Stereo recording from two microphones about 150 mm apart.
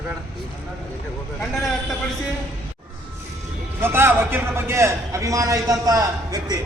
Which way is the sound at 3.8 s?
15° right (ahead or behind).